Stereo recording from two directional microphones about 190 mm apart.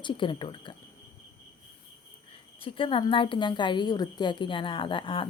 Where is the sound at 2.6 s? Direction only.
25° left (ahead or behind).